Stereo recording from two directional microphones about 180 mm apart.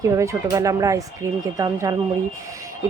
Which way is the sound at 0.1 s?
15° right (ahead or behind).